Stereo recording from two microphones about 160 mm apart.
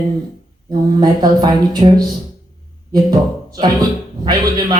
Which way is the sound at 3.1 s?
25° right (ahead or behind).